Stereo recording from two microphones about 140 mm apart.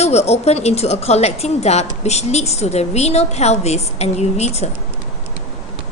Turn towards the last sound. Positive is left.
turn(degrees=50)  # may be behind; listen again after turning